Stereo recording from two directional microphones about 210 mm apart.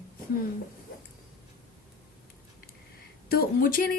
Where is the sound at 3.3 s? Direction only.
45° left (ahead or behind).